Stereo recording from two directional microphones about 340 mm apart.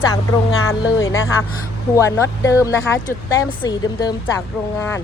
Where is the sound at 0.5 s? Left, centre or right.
Left.